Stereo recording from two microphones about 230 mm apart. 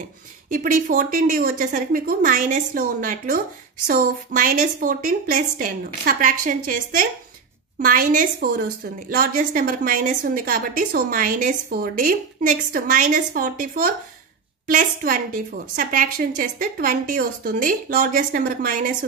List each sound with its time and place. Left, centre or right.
0.5 s a woman's voice: right